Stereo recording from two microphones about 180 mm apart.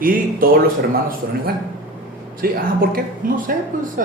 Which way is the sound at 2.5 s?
55° right (ahead or behind).